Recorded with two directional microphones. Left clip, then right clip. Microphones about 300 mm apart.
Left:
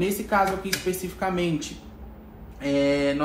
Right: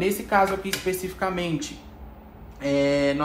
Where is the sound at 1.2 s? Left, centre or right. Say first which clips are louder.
Left 1 dB; right.